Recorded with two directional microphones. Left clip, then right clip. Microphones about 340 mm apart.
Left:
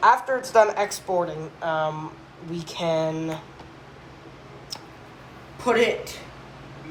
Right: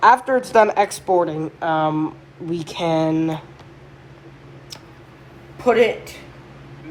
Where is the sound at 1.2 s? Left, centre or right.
Right.